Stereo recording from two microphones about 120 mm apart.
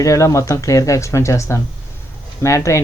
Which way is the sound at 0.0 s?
25° left (ahead or behind).